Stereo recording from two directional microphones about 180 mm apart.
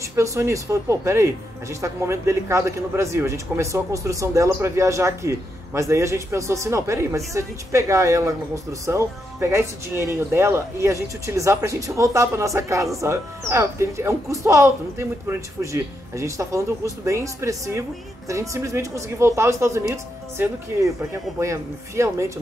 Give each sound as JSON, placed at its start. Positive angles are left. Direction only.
{"t": 0.1, "sound": "speech", "side_deg": -15}